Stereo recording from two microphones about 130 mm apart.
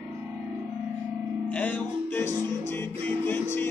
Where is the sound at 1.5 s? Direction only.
15° left (ahead or behind).